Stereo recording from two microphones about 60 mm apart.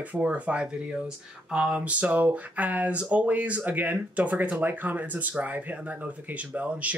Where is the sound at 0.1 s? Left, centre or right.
Right.